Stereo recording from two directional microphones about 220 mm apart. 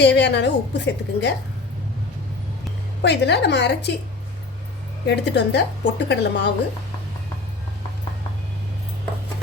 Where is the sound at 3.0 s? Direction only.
50° left (ahead or behind).